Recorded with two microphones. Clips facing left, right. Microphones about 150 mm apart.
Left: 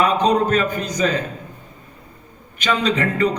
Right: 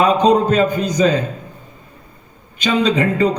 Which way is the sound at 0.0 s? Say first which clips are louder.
Right 4 dB; 30° right (ahead or behind).